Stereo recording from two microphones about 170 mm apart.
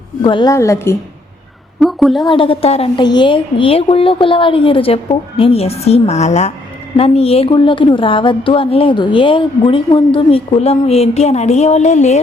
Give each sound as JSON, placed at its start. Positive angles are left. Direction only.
{"t": 0.2, "sound": "a woman's voice", "side_deg": 30}
{"t": 0.5, "sound": "a woman's voice", "side_deg": 15}
{"t": 1.8, "sound": "a woman's voice", "side_deg": 0}
{"t": 2.2, "sound": "a woman's voice", "side_deg": 30}